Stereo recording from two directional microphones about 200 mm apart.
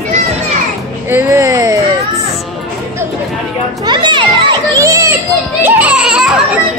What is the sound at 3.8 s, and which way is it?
A child's voice, 25° right (ahead or behind).